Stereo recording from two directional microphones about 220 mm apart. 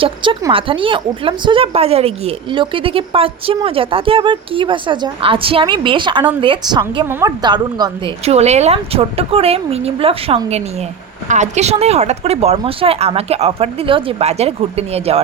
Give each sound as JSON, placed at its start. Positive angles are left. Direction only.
{"t": 0.0, "sound": "speech", "side_deg": -20}